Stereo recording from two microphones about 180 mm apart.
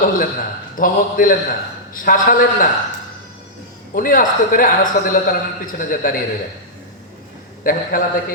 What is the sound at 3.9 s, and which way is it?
A man's voice, 50° left (ahead or behind).